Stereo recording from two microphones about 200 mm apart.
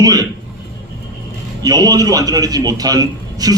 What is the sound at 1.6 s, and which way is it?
A man's voice, 20° right (ahead or behind).